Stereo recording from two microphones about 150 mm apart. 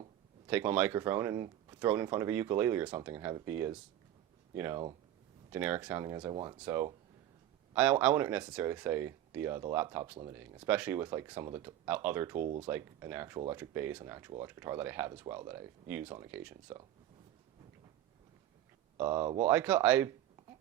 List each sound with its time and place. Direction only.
0.4 s speech: 10° right (ahead or behind)
6.3 s speech: 30° right (ahead or behind)
6.6 s speech: 15° right (ahead or behind)
18.9 s speech: 10° right (ahead or behind)